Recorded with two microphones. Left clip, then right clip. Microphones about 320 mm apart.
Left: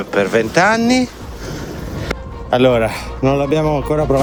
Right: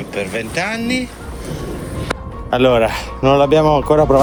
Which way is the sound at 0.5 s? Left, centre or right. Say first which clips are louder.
Left 6 dB; centre.